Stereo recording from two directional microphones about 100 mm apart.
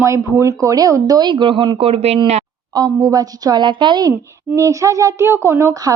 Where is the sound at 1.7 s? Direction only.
75° right (ahead or behind).